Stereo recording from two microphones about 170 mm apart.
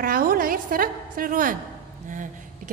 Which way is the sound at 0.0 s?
55° right (ahead or behind).